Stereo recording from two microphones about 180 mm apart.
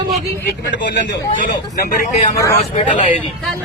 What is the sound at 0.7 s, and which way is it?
Speech, 75° left (ahead or behind).